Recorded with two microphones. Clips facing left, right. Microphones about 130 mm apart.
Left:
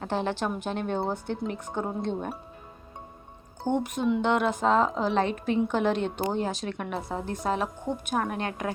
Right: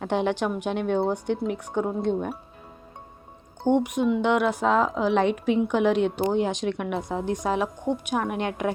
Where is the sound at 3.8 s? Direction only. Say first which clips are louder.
Right 3 dB; 15° right (ahead or behind).